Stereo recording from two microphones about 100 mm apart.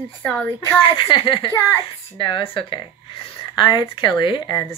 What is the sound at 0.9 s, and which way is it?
Speech, 60° left (ahead or behind).